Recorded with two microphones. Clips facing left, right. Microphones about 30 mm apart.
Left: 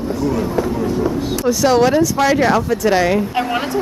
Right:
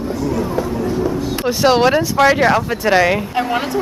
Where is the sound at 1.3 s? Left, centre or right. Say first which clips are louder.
Even; right.